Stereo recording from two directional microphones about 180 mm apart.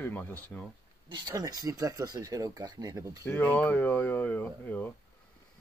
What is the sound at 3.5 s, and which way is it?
Speech, 10° left (ahead or behind).